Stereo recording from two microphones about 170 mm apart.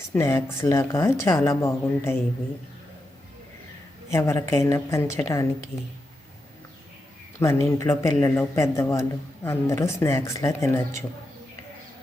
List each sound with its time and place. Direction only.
0.1 s a man's voice: 20° left (ahead or behind)
4.1 s a man's voice: 15° left (ahead or behind)
7.3 s a man's voice: 15° left (ahead or behind)